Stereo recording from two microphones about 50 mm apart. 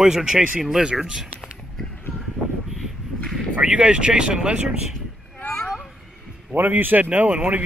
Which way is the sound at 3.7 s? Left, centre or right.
Right.